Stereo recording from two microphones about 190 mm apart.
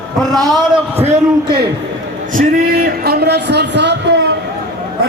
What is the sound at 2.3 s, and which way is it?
Speech, 50° right (ahead or behind).